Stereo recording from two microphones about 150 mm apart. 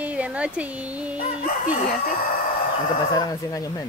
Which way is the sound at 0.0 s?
10° right (ahead or behind).